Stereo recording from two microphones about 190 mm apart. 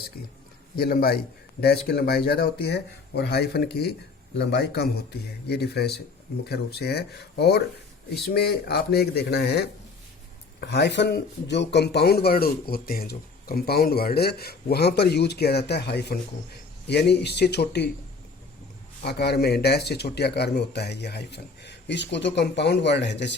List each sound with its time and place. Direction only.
0.8 s a man's voice: 50° left (ahead or behind)
19.0 s speech: 60° left (ahead or behind)